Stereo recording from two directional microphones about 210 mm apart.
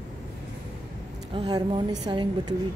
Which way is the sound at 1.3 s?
25° right (ahead or behind).